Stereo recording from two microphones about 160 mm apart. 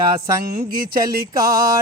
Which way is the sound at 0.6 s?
70° right (ahead or behind).